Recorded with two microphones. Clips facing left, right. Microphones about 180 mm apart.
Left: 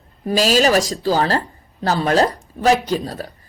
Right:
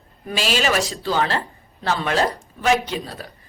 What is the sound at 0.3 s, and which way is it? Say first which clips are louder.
A woman's voice: left 6 dB; 40° left (ahead or behind).